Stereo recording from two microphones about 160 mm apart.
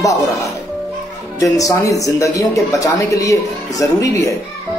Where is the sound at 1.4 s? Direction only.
20° left (ahead or behind).